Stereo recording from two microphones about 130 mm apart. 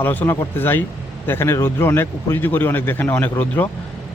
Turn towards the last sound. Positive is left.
turn(degrees=15)  # may be behind; listen again after turning